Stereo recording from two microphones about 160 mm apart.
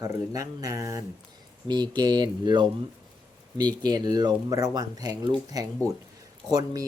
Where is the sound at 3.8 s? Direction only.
25° right (ahead or behind).